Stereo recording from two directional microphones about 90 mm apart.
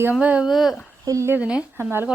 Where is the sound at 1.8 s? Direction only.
25° right (ahead or behind).